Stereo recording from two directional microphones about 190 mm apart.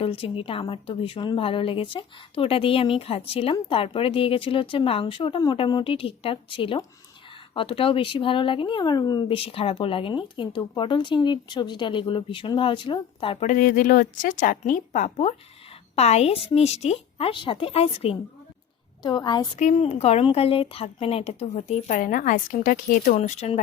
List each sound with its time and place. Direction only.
0.0 s speech: 30° left (ahead or behind)
19.5 s speech: 40° left (ahead or behind)